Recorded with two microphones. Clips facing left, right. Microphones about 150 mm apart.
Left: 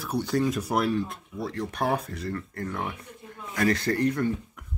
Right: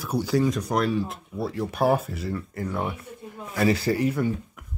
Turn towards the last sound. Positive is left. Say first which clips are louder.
# right 1 dB
turn(degrees=-5)  # may be behind; listen again after turning